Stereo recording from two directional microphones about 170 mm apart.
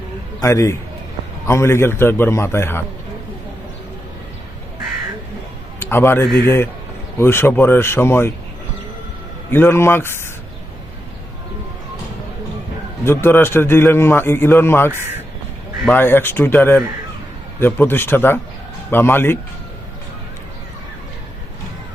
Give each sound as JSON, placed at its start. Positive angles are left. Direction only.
{"t": 0.4, "sound": "a man's voice", "side_deg": 15}
{"t": 5.8, "sound": "a man's voice", "side_deg": 15}
{"t": 9.5, "sound": "a man's voice", "side_deg": 15}
{"t": 13.1, "sound": "a man's voice", "side_deg": 15}